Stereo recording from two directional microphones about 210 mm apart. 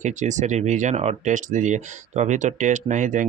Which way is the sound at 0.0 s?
35° right (ahead or behind).